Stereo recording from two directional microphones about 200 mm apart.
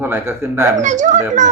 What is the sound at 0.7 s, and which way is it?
Speech, 40° right (ahead or behind).